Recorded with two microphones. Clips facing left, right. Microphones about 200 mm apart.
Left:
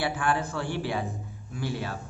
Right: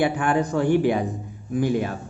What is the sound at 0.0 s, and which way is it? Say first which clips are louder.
A man's voice: right 7 dB; 20° right (ahead or behind).